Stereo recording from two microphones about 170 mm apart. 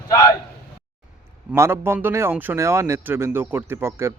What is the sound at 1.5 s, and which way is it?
A man's voice, 15° right (ahead or behind).